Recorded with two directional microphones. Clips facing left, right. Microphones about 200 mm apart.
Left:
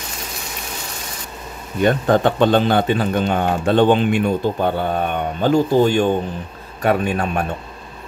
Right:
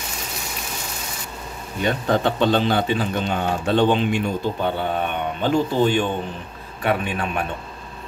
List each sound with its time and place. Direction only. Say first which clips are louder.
1.8 s a man's voice: left 5 dB; 50° left (ahead or behind)